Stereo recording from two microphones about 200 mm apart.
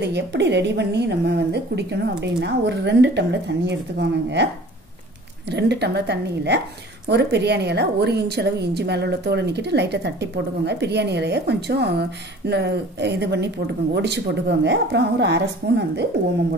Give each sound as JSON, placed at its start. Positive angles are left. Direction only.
{"t": 0.0, "sound": "a woman's voice", "side_deg": -60}
{"t": 5.5, "sound": "a woman's voice", "side_deg": -55}